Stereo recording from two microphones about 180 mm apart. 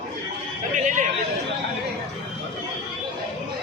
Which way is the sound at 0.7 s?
45° right (ahead or behind).